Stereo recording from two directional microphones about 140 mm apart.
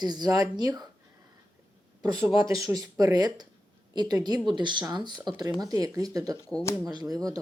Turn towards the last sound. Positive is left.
turn(degrees=-25)  # may be behind; listen again after turning